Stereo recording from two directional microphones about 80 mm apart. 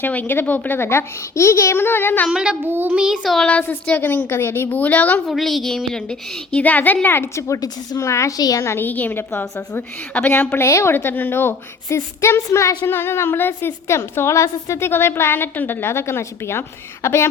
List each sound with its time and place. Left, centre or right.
0.0 s a woman's voice: left
2.3 s a child's voice: centre
2.6 s child singing: right
2.9 s a child's voice: centre
3.2 s a woman's voice: centre
3.6 s a woman's voice: centre
5.2 s a woman's voice: centre; by 7.4 s left
7.4 s a woman's voice: left
8.4 s a woman's voice: left
8.6 s a woman's voice: left
8.9 s a woman's voice: left
10.7 s a woman's voice: left
10.9 s a woman's voice: left